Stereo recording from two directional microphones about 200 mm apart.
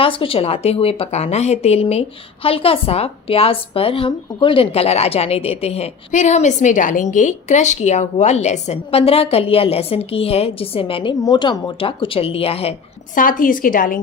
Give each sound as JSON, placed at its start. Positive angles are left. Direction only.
{"t": 0.0, "sound": "a woman's voice", "side_deg": 25}
{"t": 13.1, "sound": "a woman's voice", "side_deg": 45}